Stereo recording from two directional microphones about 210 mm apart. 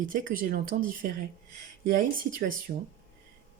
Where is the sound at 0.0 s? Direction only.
40° right (ahead or behind).